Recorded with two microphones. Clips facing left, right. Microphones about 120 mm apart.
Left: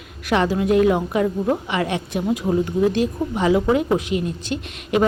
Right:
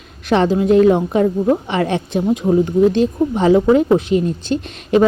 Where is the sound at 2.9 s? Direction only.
30° right (ahead or behind).